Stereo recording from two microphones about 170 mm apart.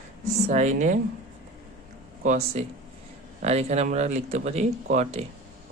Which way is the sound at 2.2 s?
40° right (ahead or behind).